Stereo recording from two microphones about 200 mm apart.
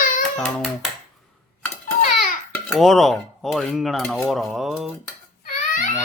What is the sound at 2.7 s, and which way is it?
Speech, centre (ahead or behind).